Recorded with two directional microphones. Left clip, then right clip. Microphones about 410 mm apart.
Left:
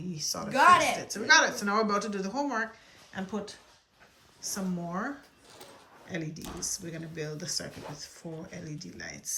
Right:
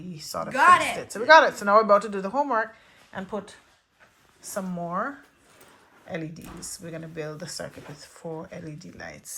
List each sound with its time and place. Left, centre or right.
0.1 s a woman's voice: centre
4.4 s speech: centre